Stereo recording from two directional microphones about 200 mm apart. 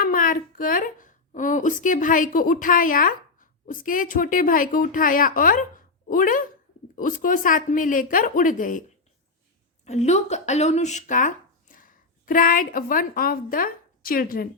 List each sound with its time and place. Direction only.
0.0 s a woman's voice: 45° left (ahead or behind)
9.8 s speech: 35° left (ahead or behind)